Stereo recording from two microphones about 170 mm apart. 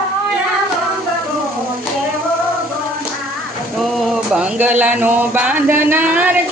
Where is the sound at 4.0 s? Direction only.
5° right (ahead or behind).